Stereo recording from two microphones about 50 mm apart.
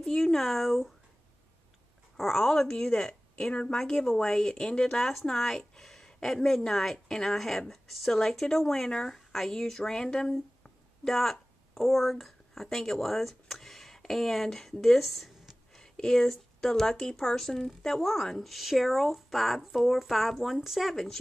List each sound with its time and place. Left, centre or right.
0.0 s speech: centre
2.1 s a woman's voice: centre
20.9 s a woman's voice: centre